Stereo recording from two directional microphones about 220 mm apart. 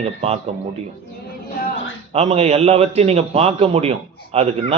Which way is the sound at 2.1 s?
30° right (ahead or behind).